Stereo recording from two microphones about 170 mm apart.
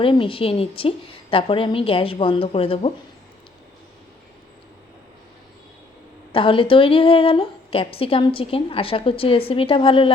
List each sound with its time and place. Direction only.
0.0 s a woman's voice: 30° left (ahead or behind)
6.3 s a woman's voice: 30° left (ahead or behind)